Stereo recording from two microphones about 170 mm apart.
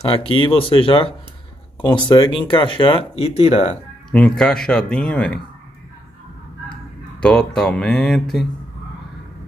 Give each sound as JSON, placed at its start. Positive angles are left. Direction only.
{"t": 0.1, "sound": "speech", "side_deg": 30}
{"t": 4.1, "sound": "speech", "side_deg": 5}
{"t": 7.2, "sound": "speech", "side_deg": 5}